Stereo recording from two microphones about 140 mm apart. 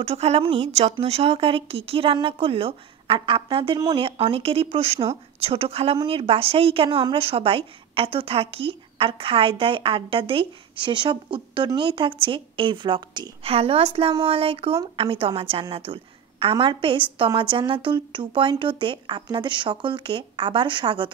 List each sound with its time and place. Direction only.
0.0 s a woman's voice: 45° right (ahead or behind)
13.4 s a woman's voice: 45° right (ahead or behind)